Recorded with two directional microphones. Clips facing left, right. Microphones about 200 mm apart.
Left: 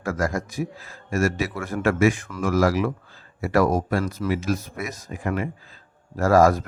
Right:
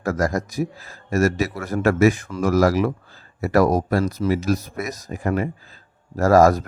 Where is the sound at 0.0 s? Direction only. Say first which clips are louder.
Right 3 dB; 40° right (ahead or behind).